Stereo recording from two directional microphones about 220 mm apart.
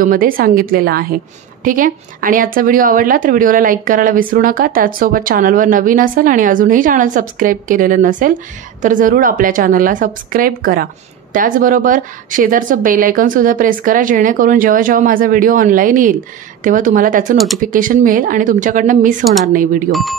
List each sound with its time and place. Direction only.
0.0 s speech: 40° right (ahead or behind)
19.9 s speech: centre (ahead or behind)